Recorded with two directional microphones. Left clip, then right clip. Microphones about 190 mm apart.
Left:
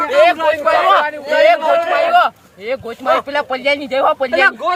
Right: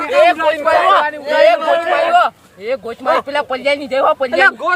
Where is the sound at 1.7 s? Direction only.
40° right (ahead or behind).